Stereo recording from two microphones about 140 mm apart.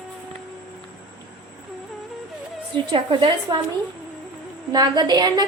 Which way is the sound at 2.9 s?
35° right (ahead or behind).